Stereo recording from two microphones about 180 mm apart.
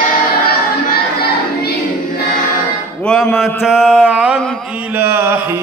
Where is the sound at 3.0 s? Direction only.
5° left (ahead or behind).